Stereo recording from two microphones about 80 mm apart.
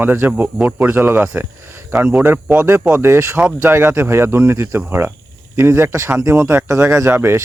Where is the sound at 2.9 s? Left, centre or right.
Right.